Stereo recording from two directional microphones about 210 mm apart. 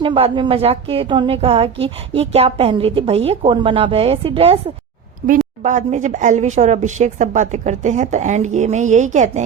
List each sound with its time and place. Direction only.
0.0 s a woman's voice: 25° right (ahead or behind)
5.2 s speech: 40° right (ahead or behind)